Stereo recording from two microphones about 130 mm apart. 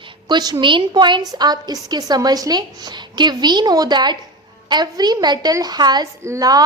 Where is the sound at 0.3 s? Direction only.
30° right (ahead or behind).